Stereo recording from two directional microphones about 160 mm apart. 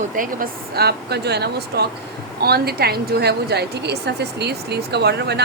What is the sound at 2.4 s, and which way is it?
A woman's voice, 80° right.